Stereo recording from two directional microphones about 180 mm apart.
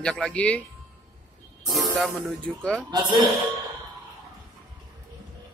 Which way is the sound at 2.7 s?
20° right (ahead or behind).